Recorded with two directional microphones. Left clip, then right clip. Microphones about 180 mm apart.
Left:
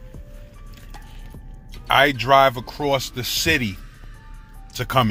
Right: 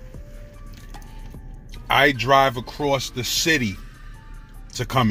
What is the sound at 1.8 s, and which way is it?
Speech, centre (ahead or behind).